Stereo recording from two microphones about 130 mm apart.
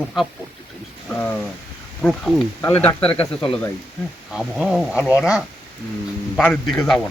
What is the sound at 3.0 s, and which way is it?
Speech, 45° left (ahead or behind).